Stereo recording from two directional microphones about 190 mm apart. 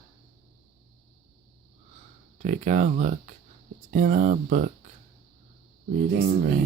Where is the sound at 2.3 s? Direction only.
40° right (ahead or behind).